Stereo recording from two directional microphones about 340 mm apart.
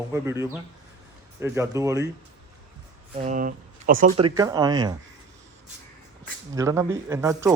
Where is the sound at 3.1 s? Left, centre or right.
Right.